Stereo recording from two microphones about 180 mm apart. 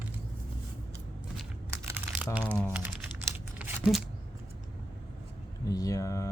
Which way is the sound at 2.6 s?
10° right (ahead or behind).